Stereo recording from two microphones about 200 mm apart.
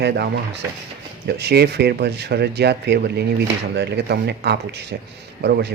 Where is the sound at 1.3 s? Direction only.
55° right (ahead or behind).